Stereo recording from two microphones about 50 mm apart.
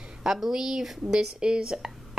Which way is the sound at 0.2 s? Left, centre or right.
Centre.